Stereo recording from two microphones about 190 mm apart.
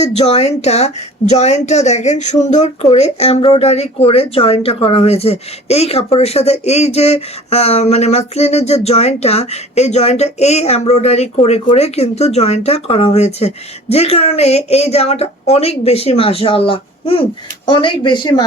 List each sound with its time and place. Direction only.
0.0 s speech: 35° left (ahead or behind)